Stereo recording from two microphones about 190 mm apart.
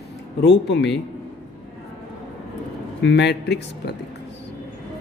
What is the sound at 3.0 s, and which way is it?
Speech, 65° left (ahead or behind).